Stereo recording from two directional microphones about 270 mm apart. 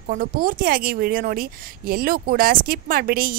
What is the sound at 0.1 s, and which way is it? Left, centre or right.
Speech, right.